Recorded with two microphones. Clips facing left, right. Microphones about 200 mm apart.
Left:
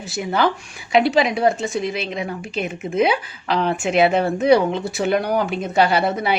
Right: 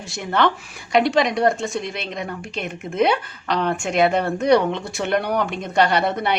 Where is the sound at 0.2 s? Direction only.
5° left (ahead or behind).